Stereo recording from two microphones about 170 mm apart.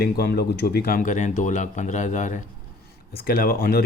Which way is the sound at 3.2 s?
60° left (ahead or behind).